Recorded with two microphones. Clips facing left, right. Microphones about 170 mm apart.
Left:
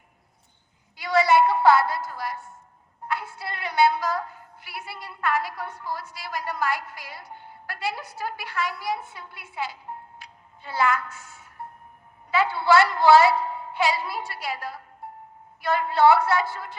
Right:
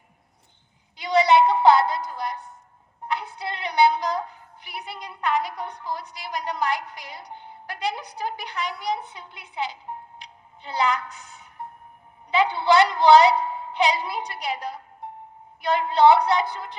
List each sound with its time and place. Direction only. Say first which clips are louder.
0.9 s a sound: right 2 dB; 20° right (ahead or behind)
3.1 s a woman's voice: right 2 dB; 20° right (ahead or behind)
10.2 s music: right 2 dB; 20° right (ahead or behind)
12.3 s a woman's voice: right 1 dB; 20° right (ahead or behind)